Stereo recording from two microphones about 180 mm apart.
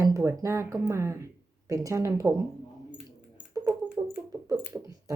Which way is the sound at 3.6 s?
5° right (ahead or behind).